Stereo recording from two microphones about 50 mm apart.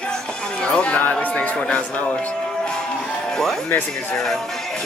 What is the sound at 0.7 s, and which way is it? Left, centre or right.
Speech, left.